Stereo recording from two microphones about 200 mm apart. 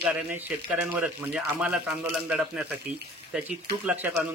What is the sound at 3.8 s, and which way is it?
Speech, 5° right (ahead or behind).